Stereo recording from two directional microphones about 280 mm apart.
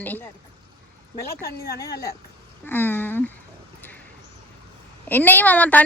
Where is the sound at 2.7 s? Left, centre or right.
Centre.